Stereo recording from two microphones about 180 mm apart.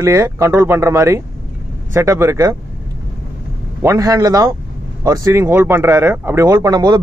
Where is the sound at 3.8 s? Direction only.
20° right (ahead or behind).